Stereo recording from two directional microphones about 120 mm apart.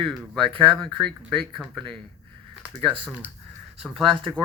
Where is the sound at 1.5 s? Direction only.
Centre (ahead or behind).